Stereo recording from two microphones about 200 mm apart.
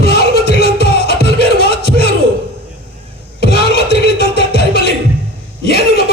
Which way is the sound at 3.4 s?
55° left (ahead or behind).